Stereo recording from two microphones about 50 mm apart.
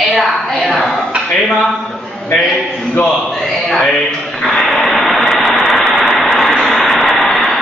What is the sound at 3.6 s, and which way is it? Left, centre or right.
Speech, centre.